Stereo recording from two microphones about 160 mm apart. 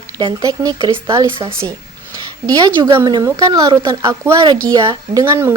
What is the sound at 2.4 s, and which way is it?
A woman's voice, 25° right (ahead or behind).